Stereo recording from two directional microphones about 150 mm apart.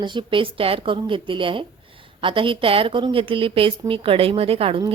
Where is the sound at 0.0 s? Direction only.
30° right (ahead or behind).